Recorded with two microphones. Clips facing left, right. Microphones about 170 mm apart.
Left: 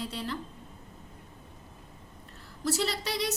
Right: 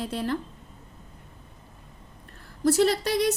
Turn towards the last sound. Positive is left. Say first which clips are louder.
# right 9 dB
turn(degrees=-50)  # may be behind; listen again after turning